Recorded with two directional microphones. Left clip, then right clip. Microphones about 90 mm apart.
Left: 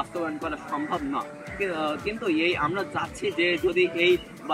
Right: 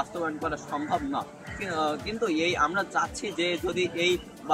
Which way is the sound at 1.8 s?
35° right (ahead or behind).